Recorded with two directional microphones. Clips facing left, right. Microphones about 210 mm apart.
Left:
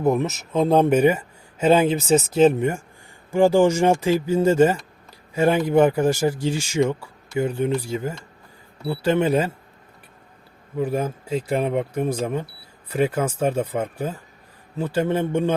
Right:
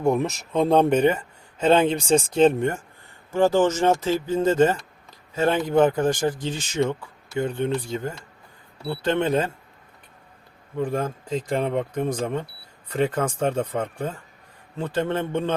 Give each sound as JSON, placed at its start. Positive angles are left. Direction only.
{"t": 0.0, "sound": "speech", "side_deg": 0}
{"t": 10.8, "sound": "speech", "side_deg": 5}